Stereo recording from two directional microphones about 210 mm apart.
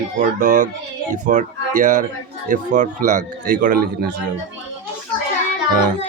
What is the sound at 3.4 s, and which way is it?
Speech, 40° right (ahead or behind).